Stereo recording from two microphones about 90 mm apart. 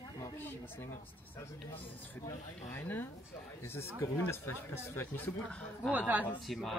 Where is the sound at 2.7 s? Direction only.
25° left (ahead or behind).